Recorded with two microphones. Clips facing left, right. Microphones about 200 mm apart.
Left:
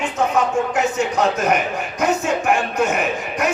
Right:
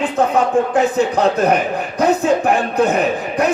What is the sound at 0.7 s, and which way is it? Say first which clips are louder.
A man's voice: right 5 dB; 35° right (ahead or behind).